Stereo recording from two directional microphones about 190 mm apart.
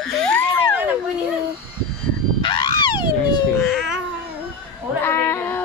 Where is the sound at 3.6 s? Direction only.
Centre (ahead or behind).